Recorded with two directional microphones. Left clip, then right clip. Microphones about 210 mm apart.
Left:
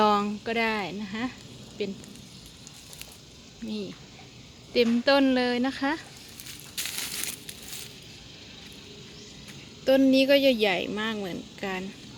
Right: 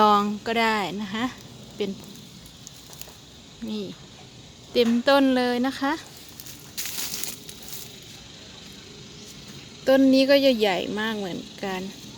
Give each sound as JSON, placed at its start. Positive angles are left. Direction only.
{"t": 0.0, "sound": "speech", "side_deg": -5}
{"t": 3.6, "sound": "speech", "side_deg": 0}
{"t": 6.7, "sound": "crumpling", "side_deg": 0}
{"t": 9.8, "sound": "speech", "side_deg": -5}